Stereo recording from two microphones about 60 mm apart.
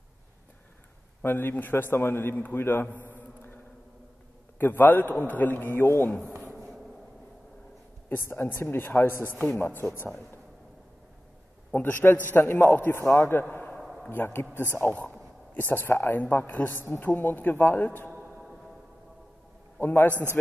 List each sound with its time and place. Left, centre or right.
1.2 s a woman's voice: left
3.1 s mantra: left
4.6 s a woman's voice: left
6.5 s a sound: centre
8.1 s a woman's voice: left
11.7 s a woman's voice: left
13.7 s a sound: centre
14.0 s a woman's voice: left
19.8 s a woman's voice: left